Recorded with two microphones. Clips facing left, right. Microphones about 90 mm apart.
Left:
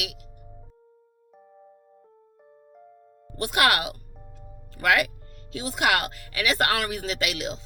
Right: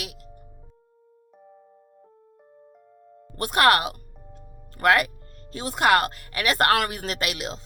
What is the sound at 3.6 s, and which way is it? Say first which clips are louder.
A woman's voice: right 4 dB; 40° right (ahead or behind).